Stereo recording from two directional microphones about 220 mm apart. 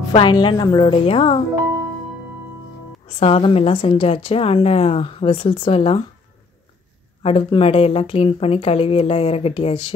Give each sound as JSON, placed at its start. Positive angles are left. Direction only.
{"t": 0.1, "sound": "speech", "side_deg": 20}
{"t": 3.2, "sound": "speech", "side_deg": 25}
{"t": 7.2, "sound": "speech", "side_deg": 25}